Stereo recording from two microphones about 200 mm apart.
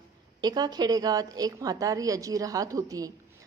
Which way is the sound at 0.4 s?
20° right (ahead or behind).